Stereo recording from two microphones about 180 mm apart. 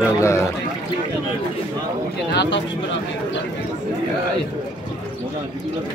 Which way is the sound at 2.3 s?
80° left.